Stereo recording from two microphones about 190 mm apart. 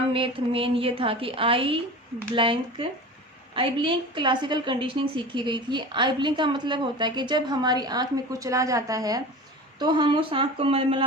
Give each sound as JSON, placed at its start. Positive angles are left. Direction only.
{"t": 0.1, "sound": "a woman's voice", "side_deg": -30}